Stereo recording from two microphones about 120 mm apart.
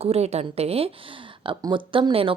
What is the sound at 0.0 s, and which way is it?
Speech, 60° right (ahead or behind).